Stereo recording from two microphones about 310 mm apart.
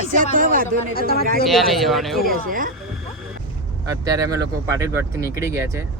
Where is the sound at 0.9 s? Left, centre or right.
Left.